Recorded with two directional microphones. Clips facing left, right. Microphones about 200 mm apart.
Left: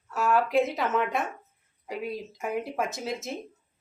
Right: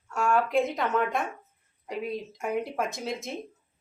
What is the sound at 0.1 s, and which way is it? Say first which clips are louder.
Speech: left 1 dB; 5° left (ahead or behind).